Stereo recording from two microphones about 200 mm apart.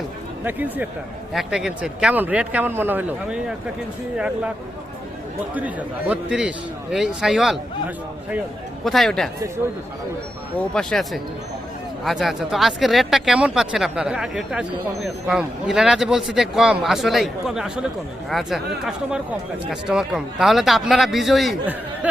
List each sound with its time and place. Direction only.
0.4 s a man's voice: 10° right (ahead or behind)
5.5 s a man's voice: 5° right (ahead or behind)
10.6 s speech: 5° left (ahead or behind)